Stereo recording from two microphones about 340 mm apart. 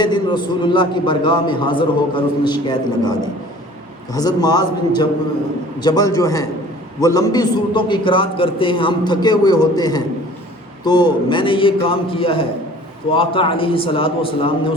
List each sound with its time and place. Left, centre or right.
0.0 s a man's voice: centre